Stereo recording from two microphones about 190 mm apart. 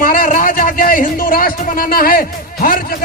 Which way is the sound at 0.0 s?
50° left (ahead or behind).